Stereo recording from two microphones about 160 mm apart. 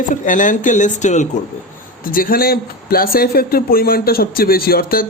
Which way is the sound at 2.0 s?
65° left (ahead or behind).